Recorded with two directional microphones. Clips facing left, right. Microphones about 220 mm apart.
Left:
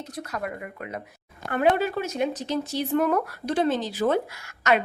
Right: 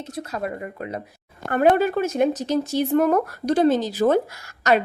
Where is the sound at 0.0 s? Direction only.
25° right (ahead or behind).